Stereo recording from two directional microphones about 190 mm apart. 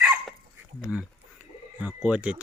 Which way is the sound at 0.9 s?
5° right (ahead or behind).